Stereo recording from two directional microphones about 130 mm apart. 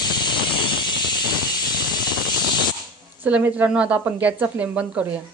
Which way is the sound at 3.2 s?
10° right (ahead or behind).